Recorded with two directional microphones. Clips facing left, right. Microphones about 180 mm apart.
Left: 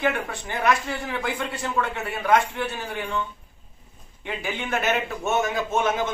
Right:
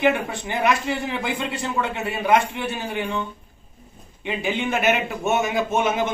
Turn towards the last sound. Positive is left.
turn(degrees=-15)  # may be behind; listen again after turning